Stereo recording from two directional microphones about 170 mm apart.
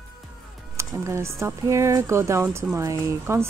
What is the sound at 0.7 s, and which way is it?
Speech, 15° right (ahead or behind).